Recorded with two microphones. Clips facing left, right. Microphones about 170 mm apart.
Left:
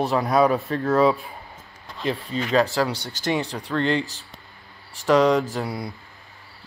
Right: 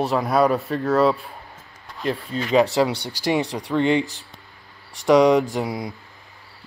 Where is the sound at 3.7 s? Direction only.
10° right (ahead or behind).